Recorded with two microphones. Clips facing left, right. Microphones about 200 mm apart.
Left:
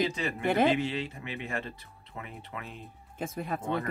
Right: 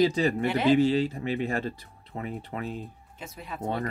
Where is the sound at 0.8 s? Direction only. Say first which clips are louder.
Right 10 dB; 35° right (ahead or behind).